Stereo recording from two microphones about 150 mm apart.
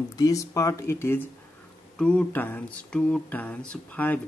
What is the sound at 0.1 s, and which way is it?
Speech, 25° left (ahead or behind).